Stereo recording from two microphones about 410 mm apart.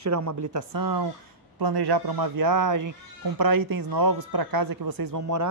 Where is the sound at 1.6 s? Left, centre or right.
Right.